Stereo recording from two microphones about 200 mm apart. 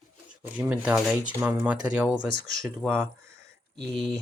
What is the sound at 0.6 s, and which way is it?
Speech, 10° right (ahead or behind).